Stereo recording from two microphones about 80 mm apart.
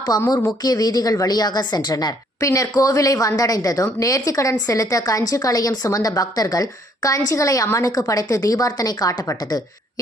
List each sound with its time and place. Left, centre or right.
0.3 s a woman's voice: left